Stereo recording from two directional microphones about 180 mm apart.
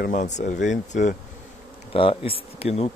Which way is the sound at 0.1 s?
40° left (ahead or behind).